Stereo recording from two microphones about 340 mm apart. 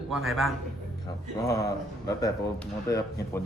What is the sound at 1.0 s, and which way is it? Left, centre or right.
A man's voice, centre.